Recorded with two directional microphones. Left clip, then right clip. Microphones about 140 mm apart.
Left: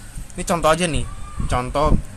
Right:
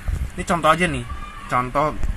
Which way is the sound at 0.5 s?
25° left (ahead or behind).